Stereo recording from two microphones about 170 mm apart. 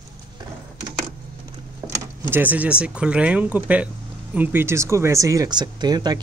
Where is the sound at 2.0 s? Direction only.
10° right (ahead or behind).